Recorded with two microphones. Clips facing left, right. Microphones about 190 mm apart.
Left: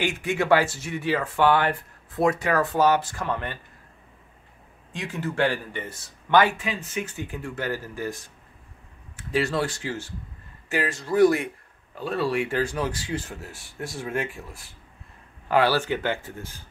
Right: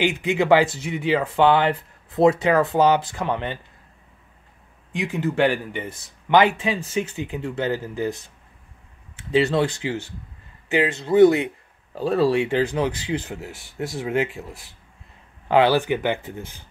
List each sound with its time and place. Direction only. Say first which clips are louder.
0.0 s speech: right 4 dB; 20° right (ahead or behind)
4.9 s speech: right 5 dB; 15° right (ahead or behind)
9.3 s speech: right 5 dB; 20° right (ahead or behind)
11.9 s speech: right 6 dB; 35° right (ahead or behind); by 16.5 s 20° right (ahead or behind)